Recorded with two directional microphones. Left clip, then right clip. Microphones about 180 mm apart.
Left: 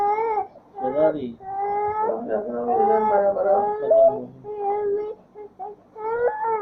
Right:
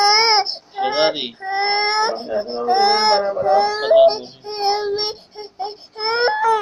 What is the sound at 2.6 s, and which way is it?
Speech, 15° right (ahead or behind).